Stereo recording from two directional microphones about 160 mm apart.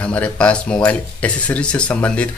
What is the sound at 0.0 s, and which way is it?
Speech, 10° left (ahead or behind).